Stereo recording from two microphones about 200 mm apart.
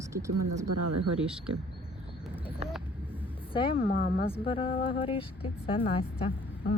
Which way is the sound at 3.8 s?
45° left (ahead or behind).